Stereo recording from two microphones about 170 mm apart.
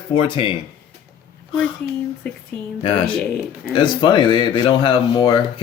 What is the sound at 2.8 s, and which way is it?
Speech, 30° left (ahead or behind).